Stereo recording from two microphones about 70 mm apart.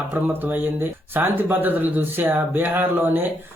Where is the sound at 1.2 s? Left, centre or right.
Right.